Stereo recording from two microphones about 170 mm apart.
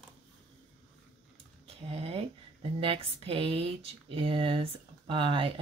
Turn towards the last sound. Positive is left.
turn(degrees=-30)  # may be behind; listen again after turning